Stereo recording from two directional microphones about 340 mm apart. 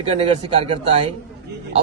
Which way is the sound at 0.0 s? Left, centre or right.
Centre.